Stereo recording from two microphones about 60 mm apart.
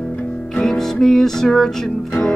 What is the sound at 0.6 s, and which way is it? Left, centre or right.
Music, centre.